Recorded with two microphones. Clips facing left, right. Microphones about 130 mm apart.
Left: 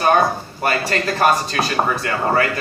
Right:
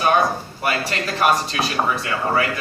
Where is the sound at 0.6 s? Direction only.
40° left (ahead or behind).